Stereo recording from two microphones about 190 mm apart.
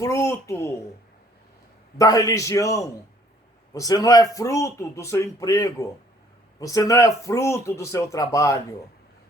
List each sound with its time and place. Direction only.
0.0 s speech: 15° left (ahead or behind)
2.0 s speech: 20° left (ahead or behind)